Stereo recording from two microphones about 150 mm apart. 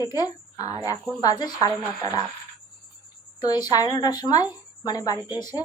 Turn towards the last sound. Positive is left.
turn(degrees=25)  # may be behind; listen again after turning